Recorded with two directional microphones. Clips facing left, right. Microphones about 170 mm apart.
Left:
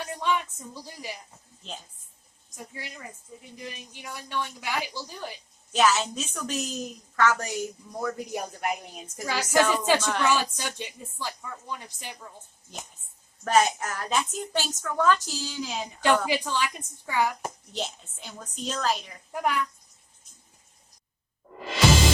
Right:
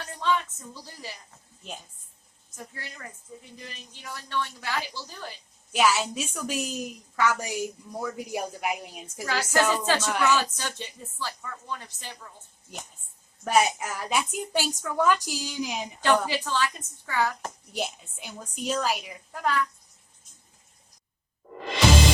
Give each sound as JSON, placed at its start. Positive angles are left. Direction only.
{"t": 0.0, "sound": "speech", "side_deg": 15}
{"t": 2.7, "sound": "speech", "side_deg": 15}
{"t": 5.7, "sound": "a woman's voice", "side_deg": -10}
{"t": 9.2, "sound": "speech", "side_deg": 10}
{"t": 10.0, "sound": "a woman's voice", "side_deg": -10}
{"t": 10.2, "sound": "speech", "side_deg": 10}
{"t": 13.4, "sound": "a woman's voice", "side_deg": -10}
{"t": 16.2, "sound": "speech", "side_deg": 15}
{"t": 17.7, "sound": "a woman's voice", "side_deg": -10}
{"t": 19.3, "sound": "speech", "side_deg": 15}